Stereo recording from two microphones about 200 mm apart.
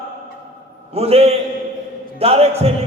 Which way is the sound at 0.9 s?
30° right (ahead or behind).